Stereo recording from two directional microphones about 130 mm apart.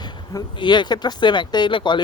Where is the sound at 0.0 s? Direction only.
35° left (ahead or behind).